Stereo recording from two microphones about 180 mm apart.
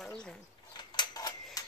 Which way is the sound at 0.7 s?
25° left (ahead or behind).